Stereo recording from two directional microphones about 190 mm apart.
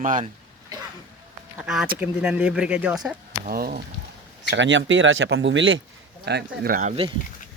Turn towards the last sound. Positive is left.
turn(degrees=-40)  # may be behind; listen again after turning